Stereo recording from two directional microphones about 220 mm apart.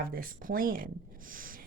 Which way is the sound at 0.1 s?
40° right (ahead or behind).